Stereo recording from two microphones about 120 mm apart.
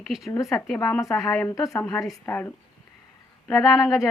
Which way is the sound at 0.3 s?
25° left (ahead or behind).